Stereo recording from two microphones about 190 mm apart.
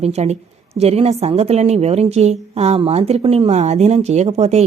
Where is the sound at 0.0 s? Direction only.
35° right (ahead or behind).